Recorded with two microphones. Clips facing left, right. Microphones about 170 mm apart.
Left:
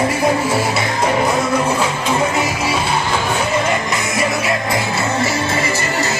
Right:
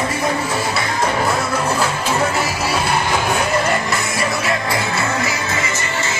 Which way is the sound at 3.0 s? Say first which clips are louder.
Even; 10° right (ahead or behind).